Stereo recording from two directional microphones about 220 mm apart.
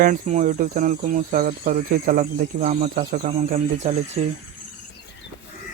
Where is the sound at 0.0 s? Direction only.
35° right (ahead or behind).